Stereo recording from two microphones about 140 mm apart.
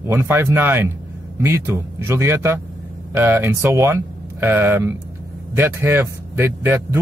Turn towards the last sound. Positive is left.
turn(degrees=-15)  # may be behind; listen again after turning